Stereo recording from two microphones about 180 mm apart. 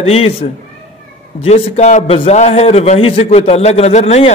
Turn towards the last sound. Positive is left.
turn(degrees=35)  # may be behind; listen again after turning